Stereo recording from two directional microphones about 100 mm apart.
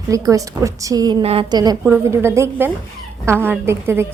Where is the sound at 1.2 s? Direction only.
75° right (ahead or behind).